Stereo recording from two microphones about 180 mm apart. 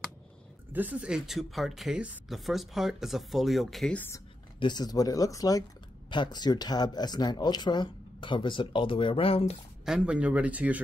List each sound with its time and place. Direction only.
0.7 s speech: 10° right (ahead or behind); by 4.2 s 10° left (ahead or behind)
4.6 s speech: 25° left (ahead or behind)
9.8 s speech: 5° right (ahead or behind)